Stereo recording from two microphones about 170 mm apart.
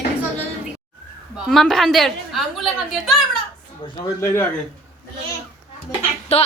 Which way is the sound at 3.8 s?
30° left (ahead or behind).